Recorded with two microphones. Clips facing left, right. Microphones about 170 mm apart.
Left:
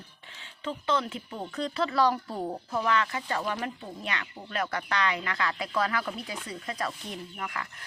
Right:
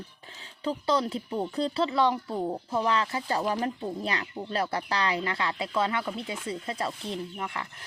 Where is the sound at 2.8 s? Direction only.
30° right (ahead or behind).